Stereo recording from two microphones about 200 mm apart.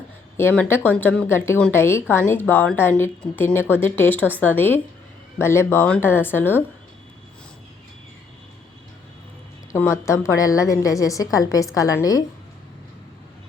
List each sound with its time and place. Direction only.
0.3 s a woman's voice: 10° left (ahead or behind)
9.7 s a woman's voice: 15° left (ahead or behind)